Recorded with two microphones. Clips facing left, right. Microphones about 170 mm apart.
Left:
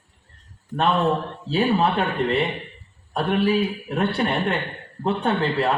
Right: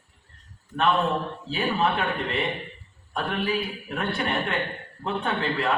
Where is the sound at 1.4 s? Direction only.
35° left (ahead or behind).